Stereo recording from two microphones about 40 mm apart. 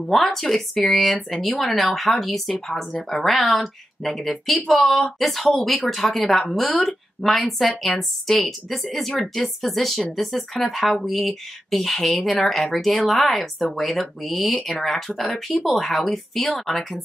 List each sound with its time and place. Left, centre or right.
0.1 s speech: centre
14.7 s speech: centre